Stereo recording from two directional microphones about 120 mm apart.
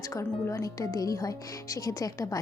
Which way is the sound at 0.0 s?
25° left (ahead or behind).